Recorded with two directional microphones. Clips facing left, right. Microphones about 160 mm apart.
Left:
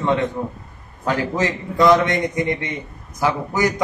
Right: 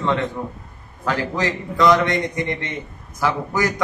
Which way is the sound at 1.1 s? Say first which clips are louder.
Left 2 dB; 20° left (ahead or behind).